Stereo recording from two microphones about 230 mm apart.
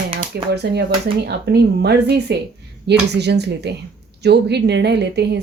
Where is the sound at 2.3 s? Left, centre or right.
Right.